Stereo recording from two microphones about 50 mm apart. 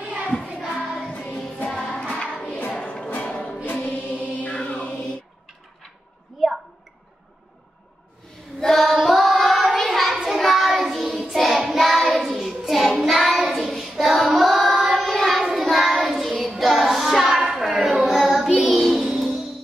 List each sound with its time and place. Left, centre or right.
0.0 s singing: right
0.9 s music: left
2.0 s choir: left
3.2 s music: centre
3.6 s music: left
6.3 s a sound: centre
8.5 s child singing: centre
17.4 s hands: centre
17.7 s a sound: right
18.0 s child singing: centre
19.1 s music: centre